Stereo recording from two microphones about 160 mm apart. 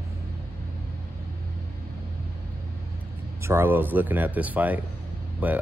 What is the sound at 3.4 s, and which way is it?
Speech, 15° right (ahead or behind).